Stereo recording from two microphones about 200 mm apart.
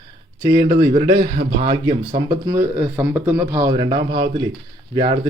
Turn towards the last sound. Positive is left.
turn(degrees=-20)  # may be behind; listen again after turning